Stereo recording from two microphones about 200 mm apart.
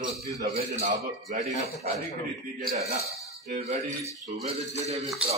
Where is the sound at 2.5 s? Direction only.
30° right (ahead or behind).